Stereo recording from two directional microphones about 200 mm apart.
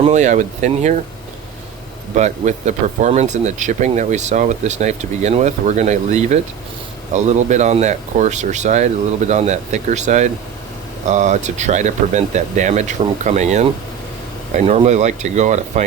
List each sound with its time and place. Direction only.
0.0 s speech: 35° right (ahead or behind)
2.1 s speech: 35° right (ahead or behind)